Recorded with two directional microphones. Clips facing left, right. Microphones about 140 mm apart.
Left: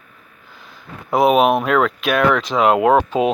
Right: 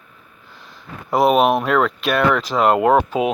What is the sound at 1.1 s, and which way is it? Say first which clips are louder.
Speech: left 1 dB; centre (ahead or behind).